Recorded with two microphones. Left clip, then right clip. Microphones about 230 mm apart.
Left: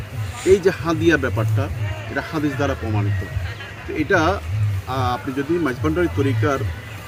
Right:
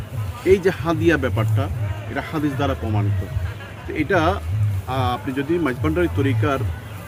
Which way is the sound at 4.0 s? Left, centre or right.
Right.